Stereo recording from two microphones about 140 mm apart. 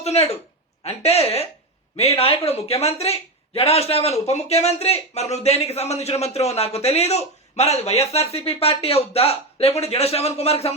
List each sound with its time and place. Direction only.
0.0 s speech: 50° left (ahead or behind)